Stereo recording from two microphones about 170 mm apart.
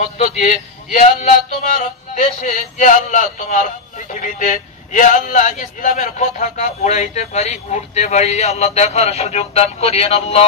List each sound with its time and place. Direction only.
0.9 s music: 45° left (ahead or behind)